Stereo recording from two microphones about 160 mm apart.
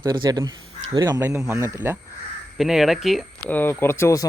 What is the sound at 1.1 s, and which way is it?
Speech, 15° right (ahead or behind).